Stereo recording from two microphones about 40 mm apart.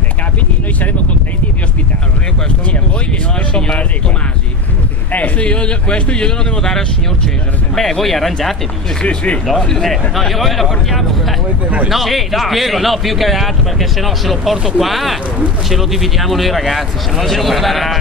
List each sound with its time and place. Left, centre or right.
3.5 s speech: left
5.1 s speech: left; by 8.5 s centre
9.0 s speech: left
9.6 s speech: centre